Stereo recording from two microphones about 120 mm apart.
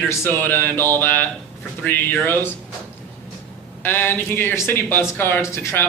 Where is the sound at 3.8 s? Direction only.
15° left (ahead or behind).